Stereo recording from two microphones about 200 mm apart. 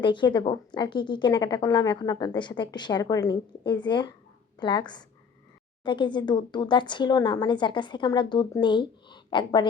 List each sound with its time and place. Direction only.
0.0 s a woman's voice: 25° left (ahead or behind)